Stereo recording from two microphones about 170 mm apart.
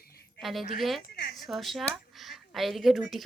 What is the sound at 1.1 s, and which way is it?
Speech, 65° left (ahead or behind).